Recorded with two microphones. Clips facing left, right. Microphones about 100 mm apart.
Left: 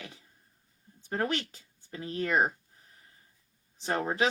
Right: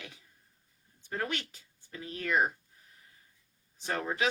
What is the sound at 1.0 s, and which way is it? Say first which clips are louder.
Speech: left 4 dB; 35° left (ahead or behind).